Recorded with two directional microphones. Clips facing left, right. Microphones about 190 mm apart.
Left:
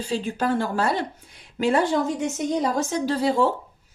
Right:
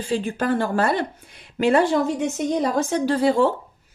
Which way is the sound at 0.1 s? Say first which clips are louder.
Right 2 dB; 55° right (ahead or behind).